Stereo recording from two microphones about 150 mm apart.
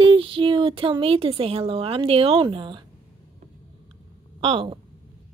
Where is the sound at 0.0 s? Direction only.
35° right (ahead or behind).